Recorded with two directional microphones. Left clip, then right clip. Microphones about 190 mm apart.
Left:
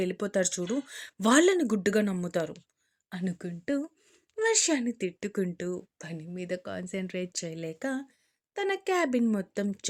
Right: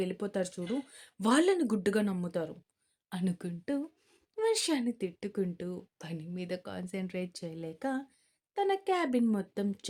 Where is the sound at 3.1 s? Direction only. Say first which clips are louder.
Left 1 dB; 5° left (ahead or behind).